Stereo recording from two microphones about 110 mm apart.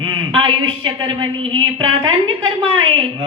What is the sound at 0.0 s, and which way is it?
A man's voice, 50° right (ahead or behind).